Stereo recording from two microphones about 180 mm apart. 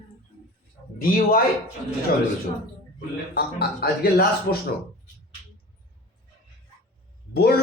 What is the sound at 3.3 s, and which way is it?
Speech, 60° left (ahead or behind).